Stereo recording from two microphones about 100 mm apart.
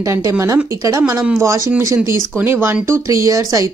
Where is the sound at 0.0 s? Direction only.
30° right (ahead or behind).